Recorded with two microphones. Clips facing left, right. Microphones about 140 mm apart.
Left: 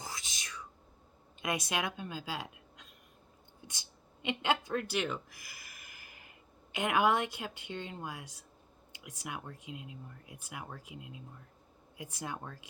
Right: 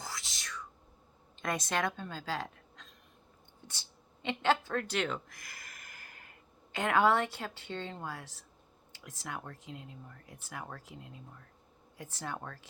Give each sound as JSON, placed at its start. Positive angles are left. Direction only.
{"t": 0.0, "sound": "whispering", "side_deg": 15}
{"t": 1.4, "sound": "speech", "side_deg": 10}
{"t": 4.3, "sound": "speech", "side_deg": 15}